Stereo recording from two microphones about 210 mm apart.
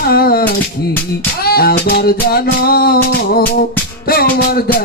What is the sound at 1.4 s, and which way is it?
Music, 45° left (ahead or behind).